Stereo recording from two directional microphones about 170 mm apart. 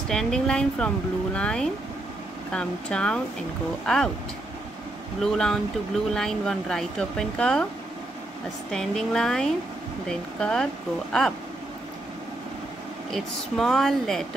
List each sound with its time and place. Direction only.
0.1 s speech: 5° left (ahead or behind)
5.2 s speech: 5° left (ahead or behind)
8.6 s speech: 5° left (ahead or behind)
13.1 s speech: centre (ahead or behind)